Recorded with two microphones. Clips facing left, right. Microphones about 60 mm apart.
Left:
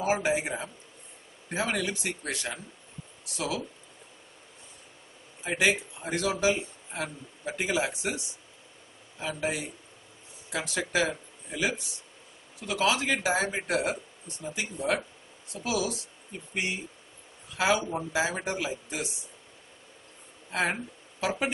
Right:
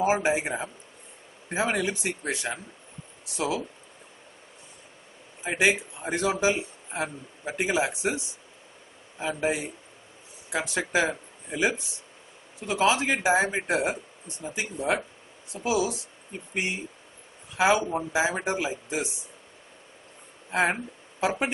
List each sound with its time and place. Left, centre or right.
0.0 s speech: right
5.4 s speech: centre
9.2 s speech: right
20.5 s speech: centre